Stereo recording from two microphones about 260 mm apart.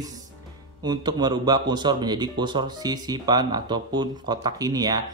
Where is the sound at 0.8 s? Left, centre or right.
Centre.